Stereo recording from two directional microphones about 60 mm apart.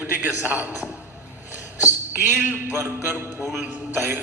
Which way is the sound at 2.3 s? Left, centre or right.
Right.